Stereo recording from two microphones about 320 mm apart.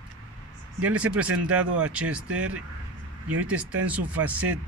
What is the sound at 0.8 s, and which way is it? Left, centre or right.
Speech, centre.